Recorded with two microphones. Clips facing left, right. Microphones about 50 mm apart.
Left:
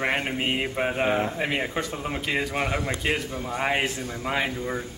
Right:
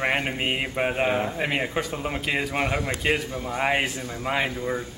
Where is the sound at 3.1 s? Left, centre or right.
Centre.